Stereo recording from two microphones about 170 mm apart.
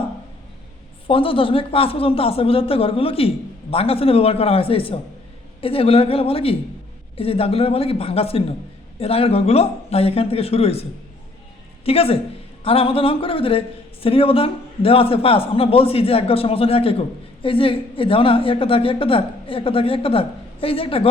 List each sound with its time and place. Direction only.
1.0 s speech: 30° left (ahead or behind)
11.9 s speech: 35° left (ahead or behind)